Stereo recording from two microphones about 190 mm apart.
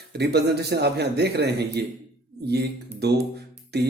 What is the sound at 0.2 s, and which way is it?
Speech, 60° right (ahead or behind).